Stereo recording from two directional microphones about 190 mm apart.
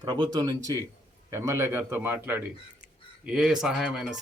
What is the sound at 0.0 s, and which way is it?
A man's voice, 25° right (ahead or behind).